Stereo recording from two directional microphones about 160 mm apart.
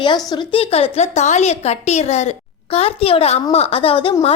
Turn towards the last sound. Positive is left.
turn(degrees=35)  # may be behind; listen again after turning